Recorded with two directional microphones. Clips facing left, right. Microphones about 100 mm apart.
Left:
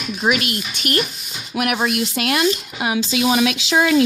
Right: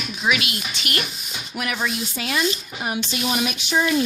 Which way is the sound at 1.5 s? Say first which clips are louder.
Left 6 dB; 65° left (ahead or behind).